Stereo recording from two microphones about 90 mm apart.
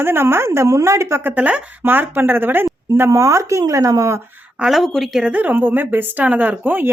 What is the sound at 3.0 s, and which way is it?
Speech, 35° right (ahead or behind).